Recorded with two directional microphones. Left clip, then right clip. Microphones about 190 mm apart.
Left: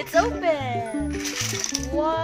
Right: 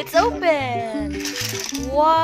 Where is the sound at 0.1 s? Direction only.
30° right (ahead or behind).